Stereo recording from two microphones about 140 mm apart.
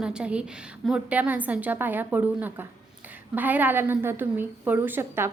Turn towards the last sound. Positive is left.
turn(degrees=-15)  # may be behind; listen again after turning